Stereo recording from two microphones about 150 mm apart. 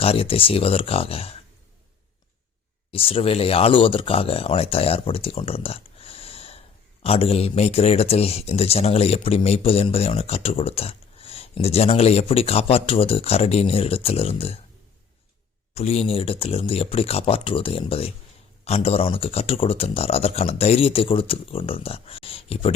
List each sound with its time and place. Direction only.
0.0 s speech: 40° left (ahead or behind)
2.9 s speech: 35° left (ahead or behind)
15.7 s speech: 45° left (ahead or behind)